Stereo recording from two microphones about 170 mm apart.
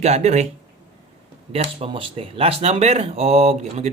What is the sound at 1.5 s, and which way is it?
Speech, 35° right (ahead or behind).